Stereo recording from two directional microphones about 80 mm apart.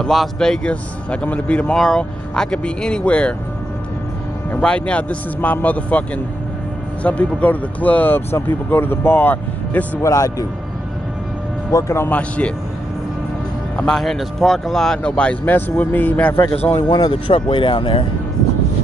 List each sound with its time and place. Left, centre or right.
0.0 s speech: centre
4.6 s speech: centre
10.0 s speech: left
11.7 s a man's voice: left
12.1 s speech: centre
13.7 s speech: centre
15.0 s a man's voice: centre; by 16.7 s left
16.8 s speech: left